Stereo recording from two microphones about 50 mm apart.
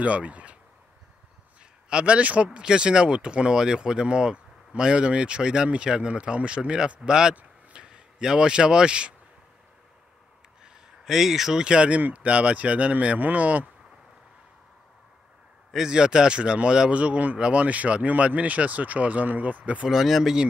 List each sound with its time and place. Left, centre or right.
0.0 s speech: right
1.9 s speech: right
7.3 s a sound: right
10.6 s speech: centre; by 13.7 s right
15.7 s speech: centre; by 19.9 s right
19.9 s speech: centre